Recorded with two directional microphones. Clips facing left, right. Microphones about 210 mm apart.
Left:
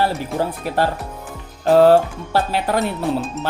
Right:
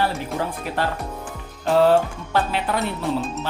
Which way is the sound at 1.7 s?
40° left (ahead or behind).